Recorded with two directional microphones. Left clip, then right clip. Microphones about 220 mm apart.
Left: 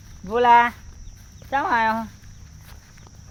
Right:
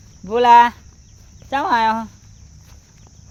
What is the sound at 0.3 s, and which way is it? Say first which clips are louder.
Speech: right 5 dB; 40° right (ahead or behind).